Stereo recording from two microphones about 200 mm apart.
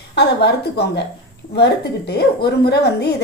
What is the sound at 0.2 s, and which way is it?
A woman's voice, 55° left (ahead or behind).